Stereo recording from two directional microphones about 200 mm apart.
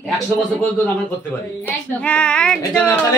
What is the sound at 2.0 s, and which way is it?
Speech, 5° left (ahead or behind).